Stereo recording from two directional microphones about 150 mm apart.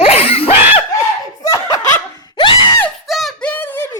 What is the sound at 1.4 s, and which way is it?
Laughter, 25° left (ahead or behind).